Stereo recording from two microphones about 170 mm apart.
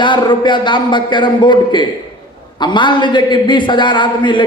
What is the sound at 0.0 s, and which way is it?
A man's voice, 30° left (ahead or behind).